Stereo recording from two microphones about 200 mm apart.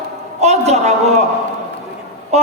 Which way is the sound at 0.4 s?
35° right (ahead or behind).